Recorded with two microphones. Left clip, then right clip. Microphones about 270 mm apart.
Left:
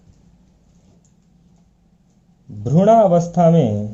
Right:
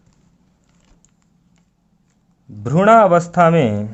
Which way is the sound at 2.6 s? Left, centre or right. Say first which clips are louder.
Right 2 dB; right.